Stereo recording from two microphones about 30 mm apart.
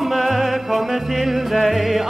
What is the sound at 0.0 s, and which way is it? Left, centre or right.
Music, centre.